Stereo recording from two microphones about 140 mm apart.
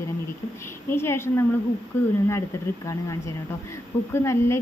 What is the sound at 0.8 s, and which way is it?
Speech, 15° left (ahead or behind).